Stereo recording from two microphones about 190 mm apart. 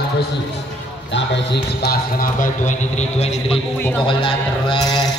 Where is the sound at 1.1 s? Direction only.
60° left (ahead or behind); by 3.6 s 35° left (ahead or behind).